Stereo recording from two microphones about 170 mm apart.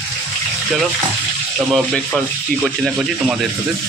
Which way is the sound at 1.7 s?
Centre (ahead or behind).